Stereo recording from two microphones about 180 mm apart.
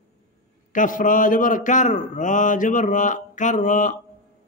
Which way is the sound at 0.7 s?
45° left (ahead or behind).